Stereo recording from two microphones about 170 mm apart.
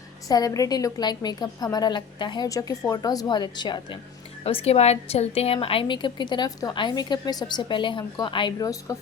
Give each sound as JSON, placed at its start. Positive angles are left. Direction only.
{"t": 0.3, "sound": "a woman's voice", "side_deg": 20}